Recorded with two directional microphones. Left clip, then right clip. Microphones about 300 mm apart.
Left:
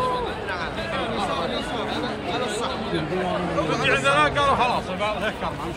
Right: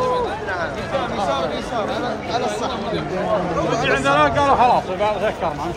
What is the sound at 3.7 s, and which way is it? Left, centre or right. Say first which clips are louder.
A man's voice: right 3 dB; right.